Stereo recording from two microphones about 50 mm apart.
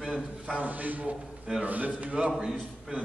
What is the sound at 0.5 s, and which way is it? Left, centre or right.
A man's voice, right.